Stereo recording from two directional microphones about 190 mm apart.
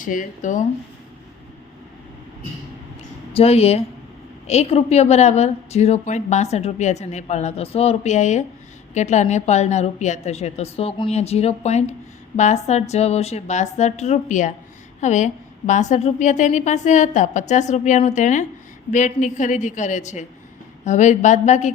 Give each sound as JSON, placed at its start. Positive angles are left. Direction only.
{"t": 0.0, "sound": "speech", "side_deg": 45}
{"t": 3.3, "sound": "a woman's voice", "side_deg": 30}